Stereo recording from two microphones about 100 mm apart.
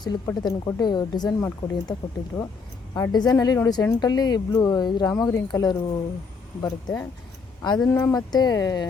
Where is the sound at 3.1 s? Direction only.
45° left (ahead or behind).